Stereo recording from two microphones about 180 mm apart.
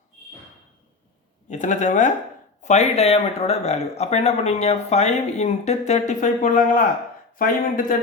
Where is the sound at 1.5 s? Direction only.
45° left (ahead or behind).